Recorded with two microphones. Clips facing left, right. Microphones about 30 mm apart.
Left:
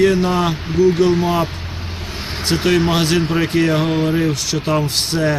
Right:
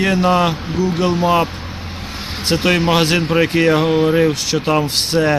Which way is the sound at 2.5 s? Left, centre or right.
Right.